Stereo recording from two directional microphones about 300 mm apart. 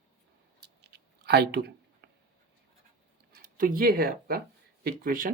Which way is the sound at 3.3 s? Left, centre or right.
Right.